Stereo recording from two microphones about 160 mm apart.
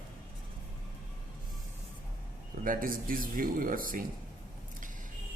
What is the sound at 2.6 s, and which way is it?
Speech, 60° right (ahead or behind).